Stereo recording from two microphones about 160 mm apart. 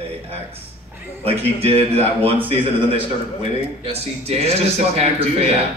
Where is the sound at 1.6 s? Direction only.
35° right (ahead or behind).